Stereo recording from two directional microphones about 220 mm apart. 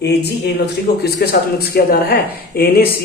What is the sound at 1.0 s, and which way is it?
Speech, 45° left (ahead or behind).